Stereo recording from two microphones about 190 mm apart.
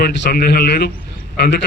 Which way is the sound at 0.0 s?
60° left (ahead or behind).